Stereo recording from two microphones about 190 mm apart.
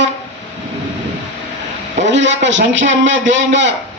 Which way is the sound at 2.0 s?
70° right (ahead or behind).